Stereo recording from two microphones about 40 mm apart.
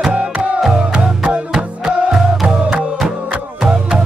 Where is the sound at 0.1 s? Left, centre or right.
Right.